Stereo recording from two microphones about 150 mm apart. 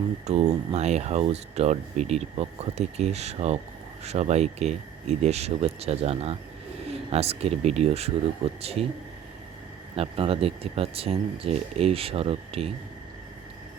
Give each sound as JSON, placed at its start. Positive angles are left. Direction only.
{"t": 0.3, "sound": "speech", "side_deg": -45}
{"t": 9.9, "sound": "speech", "side_deg": -40}